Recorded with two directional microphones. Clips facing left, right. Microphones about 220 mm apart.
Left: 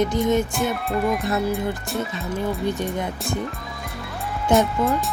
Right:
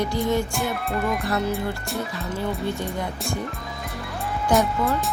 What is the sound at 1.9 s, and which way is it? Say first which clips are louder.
Speech: left 2 dB; centre (ahead or behind).